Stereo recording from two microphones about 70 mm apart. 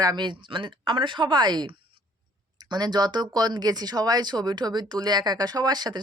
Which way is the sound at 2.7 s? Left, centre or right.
Right.